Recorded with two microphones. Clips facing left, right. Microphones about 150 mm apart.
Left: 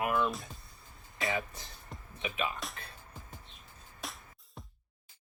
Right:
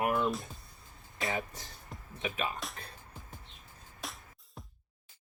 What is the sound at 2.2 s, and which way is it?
Speech, 40° right (ahead or behind).